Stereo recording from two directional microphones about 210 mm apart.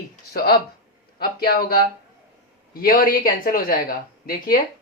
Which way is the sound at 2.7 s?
40° left (ahead or behind).